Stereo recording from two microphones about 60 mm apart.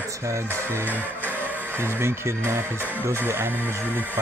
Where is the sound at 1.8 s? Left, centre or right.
Right.